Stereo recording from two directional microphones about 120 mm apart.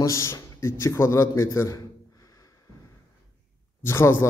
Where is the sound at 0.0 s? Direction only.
25° left (ahead or behind).